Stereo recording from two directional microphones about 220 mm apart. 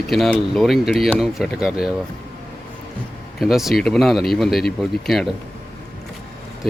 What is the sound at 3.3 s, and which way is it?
Speech, centre (ahead or behind).